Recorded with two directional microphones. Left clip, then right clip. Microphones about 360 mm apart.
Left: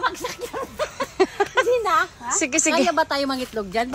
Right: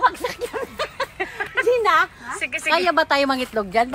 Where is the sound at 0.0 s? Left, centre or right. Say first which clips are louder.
Right 5 dB; right.